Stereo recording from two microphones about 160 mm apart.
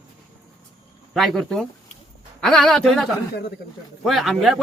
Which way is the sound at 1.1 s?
Centre (ahead or behind).